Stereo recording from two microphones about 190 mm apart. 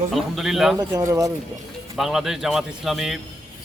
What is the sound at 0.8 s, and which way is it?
Speech, 20° right (ahead or behind).